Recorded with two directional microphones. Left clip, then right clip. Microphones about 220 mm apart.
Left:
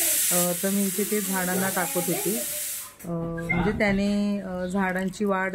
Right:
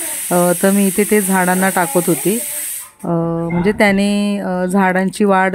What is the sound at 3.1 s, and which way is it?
Speech, 40° right (ahead or behind).